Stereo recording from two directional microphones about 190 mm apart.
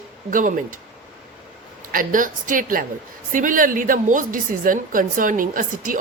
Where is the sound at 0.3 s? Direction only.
45° right (ahead or behind).